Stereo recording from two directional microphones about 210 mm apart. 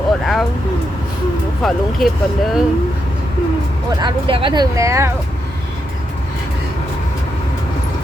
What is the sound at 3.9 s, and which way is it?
Speech, 25° right (ahead or behind).